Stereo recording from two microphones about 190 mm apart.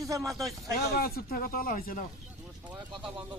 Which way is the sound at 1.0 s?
55° left (ahead or behind).